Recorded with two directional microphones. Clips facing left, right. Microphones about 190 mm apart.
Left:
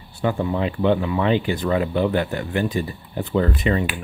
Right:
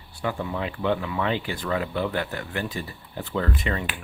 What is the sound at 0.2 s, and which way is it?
Speech, 25° left (ahead or behind).